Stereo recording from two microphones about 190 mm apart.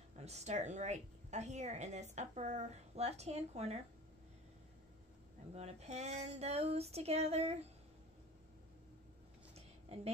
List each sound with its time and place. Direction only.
0.2 s a woman's voice: 35° right (ahead or behind)
5.5 s a woman's voice: 35° right (ahead or behind)
9.6 s a sound: 30° right (ahead or behind)